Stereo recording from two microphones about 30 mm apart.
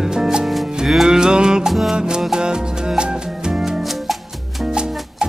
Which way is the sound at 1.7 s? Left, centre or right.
Centre.